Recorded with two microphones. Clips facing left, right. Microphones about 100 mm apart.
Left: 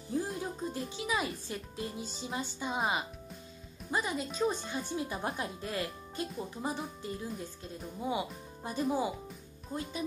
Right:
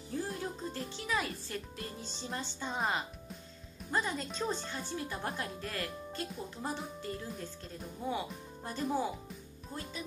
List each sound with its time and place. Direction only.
0.1 s speech: 15° left (ahead or behind)